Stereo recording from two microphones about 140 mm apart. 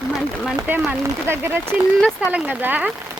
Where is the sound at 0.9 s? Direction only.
15° right (ahead or behind).